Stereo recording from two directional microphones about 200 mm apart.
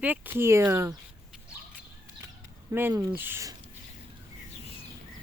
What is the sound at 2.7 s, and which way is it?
Speech, 15° right (ahead or behind).